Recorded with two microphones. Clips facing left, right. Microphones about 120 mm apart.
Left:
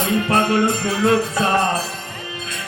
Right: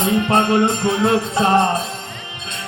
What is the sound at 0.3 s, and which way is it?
Music, 20° right (ahead or behind).